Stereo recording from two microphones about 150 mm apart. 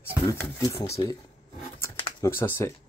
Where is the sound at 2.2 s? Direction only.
15° left (ahead or behind).